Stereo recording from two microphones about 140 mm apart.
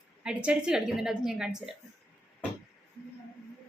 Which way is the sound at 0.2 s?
5° right (ahead or behind).